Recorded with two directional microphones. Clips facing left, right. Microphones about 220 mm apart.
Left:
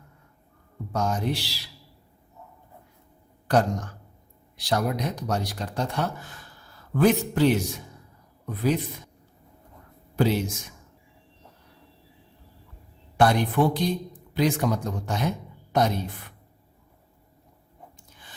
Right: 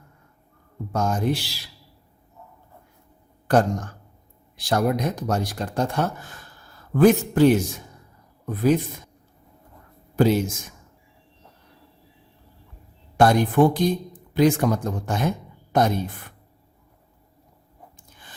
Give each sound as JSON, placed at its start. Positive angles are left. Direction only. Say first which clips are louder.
{"t": 0.9, "sound": "speech", "louder": "right 3 dB", "side_deg": -50}
{"t": 3.4, "sound": "speech", "louder": "right 3 dB", "side_deg": -50}
{"t": 10.2, "sound": "speech", "louder": "right 4 dB", "side_deg": -45}
{"t": 13.1, "sound": "speech", "louder": "right 4 dB", "side_deg": -45}